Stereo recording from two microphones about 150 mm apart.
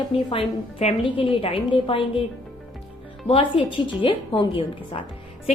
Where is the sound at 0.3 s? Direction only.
40° left (ahead or behind).